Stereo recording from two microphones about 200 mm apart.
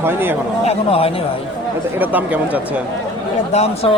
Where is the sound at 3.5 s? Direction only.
35° left (ahead or behind).